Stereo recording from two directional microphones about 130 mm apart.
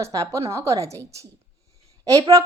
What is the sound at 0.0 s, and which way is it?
Speech, 25° right (ahead or behind).